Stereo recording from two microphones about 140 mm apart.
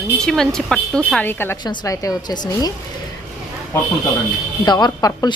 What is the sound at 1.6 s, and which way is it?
Speech, 25° left (ahead or behind).